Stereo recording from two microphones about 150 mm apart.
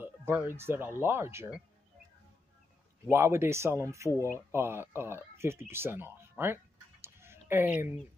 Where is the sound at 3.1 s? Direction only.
15° right (ahead or behind).